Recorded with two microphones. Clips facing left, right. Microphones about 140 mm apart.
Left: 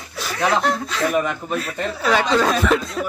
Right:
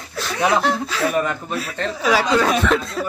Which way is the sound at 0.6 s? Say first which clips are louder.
Right 1 dB; centre (ahead or behind).